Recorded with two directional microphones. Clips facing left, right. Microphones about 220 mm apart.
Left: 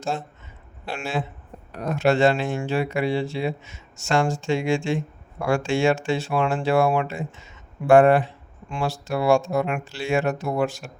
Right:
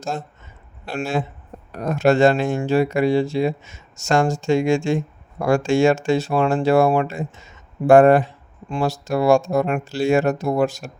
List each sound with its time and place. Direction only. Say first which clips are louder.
0.9 s speech: right 4 dB; 40° right (ahead or behind)